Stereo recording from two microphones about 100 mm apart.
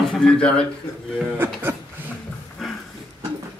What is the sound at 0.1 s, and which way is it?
Speech, 5° left (ahead or behind).